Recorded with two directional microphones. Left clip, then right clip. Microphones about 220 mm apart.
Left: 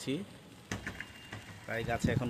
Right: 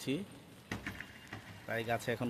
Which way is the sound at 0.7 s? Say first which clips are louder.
Left 2 dB; 45° left (ahead or behind).